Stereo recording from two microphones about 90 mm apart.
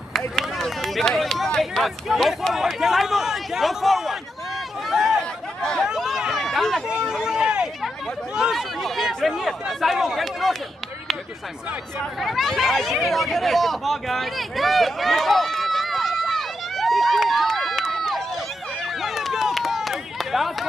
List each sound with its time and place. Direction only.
0.4 s speech: 5° left (ahead or behind)
4.8 s chatter: centre (ahead or behind)
5.9 s a sound: 5° right (ahead or behind)
8.4 s speech: 5° right (ahead or behind)
12.0 s a sound: centre (ahead or behind)
18.9 s run: centre (ahead or behind)